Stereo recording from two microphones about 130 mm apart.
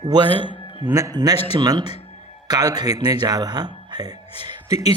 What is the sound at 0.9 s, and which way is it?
A man's voice, 25° right (ahead or behind).